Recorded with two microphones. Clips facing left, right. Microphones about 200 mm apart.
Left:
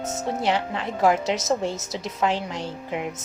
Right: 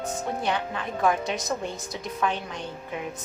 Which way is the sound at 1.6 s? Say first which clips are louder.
Left 5 dB; 85° left.